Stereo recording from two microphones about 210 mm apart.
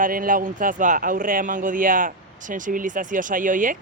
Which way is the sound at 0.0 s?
40° right (ahead or behind).